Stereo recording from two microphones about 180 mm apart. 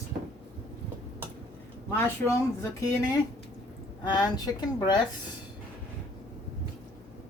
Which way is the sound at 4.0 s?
25° left (ahead or behind).